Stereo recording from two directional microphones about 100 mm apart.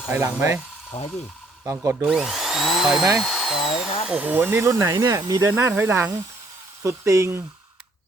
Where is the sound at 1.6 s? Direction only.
30° right (ahead or behind).